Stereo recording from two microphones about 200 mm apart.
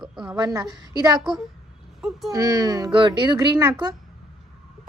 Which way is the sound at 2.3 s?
20° right (ahead or behind).